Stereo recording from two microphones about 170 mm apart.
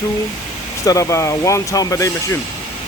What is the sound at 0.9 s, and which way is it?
Speech, 20° left (ahead or behind).